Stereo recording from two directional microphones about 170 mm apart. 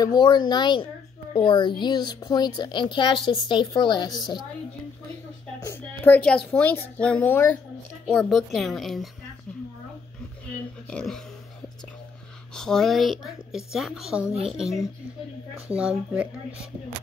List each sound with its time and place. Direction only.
0.0 s speech: 25° left (ahead or behind)
5.7 s a woman's voice: 10° left (ahead or behind)
10.9 s speech: 5° left (ahead or behind)
12.5 s a woman's voice: 5° left (ahead or behind)